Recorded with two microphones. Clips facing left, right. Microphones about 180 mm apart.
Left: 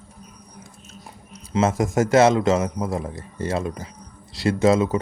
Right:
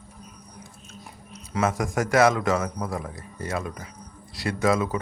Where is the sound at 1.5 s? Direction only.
25° left (ahead or behind).